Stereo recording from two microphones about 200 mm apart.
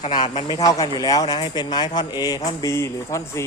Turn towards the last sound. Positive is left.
turn(degrees=15)  # may be behind; listen again after turning